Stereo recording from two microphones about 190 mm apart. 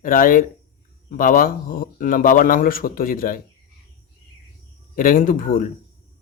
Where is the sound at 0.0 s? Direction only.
45° left (ahead or behind).